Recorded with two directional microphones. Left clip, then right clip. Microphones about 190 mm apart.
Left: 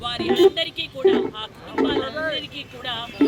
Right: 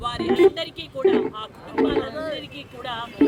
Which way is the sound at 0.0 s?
5° right (ahead or behind).